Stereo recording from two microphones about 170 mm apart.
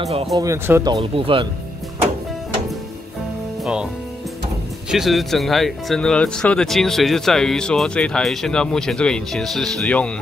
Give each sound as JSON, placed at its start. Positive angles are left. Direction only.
{"t": 0.0, "sound": "speech", "side_deg": -35}
{"t": 0.4, "sound": "speech", "side_deg": -15}
{"t": 1.1, "sound": "speech", "side_deg": -30}
{"t": 4.9, "sound": "speech", "side_deg": 0}